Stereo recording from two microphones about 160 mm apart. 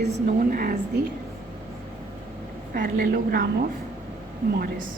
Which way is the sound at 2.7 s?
75° right (ahead or behind).